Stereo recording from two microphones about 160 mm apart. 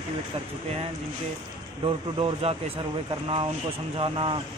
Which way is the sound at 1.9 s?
35° right (ahead or behind).